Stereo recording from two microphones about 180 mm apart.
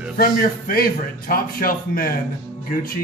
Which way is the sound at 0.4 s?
55° left (ahead or behind).